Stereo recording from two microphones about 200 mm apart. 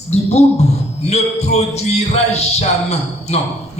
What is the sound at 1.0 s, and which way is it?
Speech, 35° left (ahead or behind).